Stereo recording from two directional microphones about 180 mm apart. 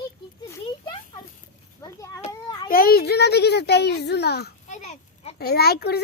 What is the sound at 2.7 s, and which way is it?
A child's voice, 55° left (ahead or behind).